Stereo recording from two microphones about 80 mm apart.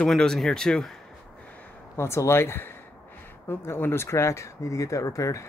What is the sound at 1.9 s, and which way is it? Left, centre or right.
Speech, left.